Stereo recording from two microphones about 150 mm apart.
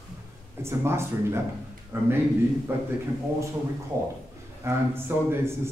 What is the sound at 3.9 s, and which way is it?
A man's voice, 20° right (ahead or behind).